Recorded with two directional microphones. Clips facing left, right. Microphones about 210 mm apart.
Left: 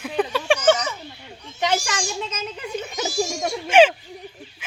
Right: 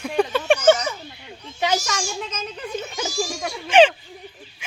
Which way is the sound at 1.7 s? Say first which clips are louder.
Even; 10° left (ahead or behind).